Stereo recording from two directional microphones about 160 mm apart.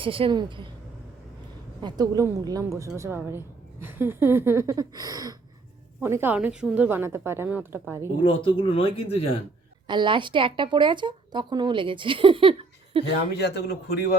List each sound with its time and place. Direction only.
0.0 s speech: 35° right (ahead or behind)
1.8 s a woman's voice: 25° right (ahead or behind)
8.2 s speech: 30° left (ahead or behind)
9.8 s speech: 30° right (ahead or behind)
13.3 s a man's voice: 90° left